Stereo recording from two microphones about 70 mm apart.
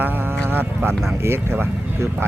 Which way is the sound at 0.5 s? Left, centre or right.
Right.